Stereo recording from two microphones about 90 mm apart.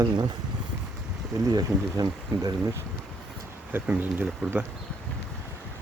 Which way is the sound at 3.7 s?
20° right (ahead or behind).